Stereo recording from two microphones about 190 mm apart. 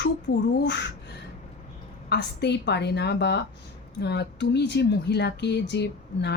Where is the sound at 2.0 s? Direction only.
65° left (ahead or behind).